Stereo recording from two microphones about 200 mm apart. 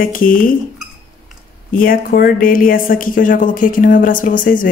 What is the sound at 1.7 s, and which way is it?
Speech, 45° left (ahead or behind).